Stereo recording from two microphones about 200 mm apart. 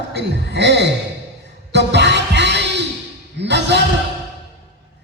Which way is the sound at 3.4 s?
60° right (ahead or behind).